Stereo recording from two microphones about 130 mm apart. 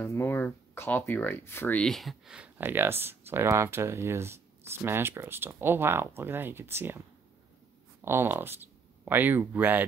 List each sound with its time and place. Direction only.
0.0 s speech: 20° left (ahead or behind)
1.8 s speech: centre (ahead or behind); by 7.0 s 15° right (ahead or behind)
8.0 s speech: 20° right (ahead or behind)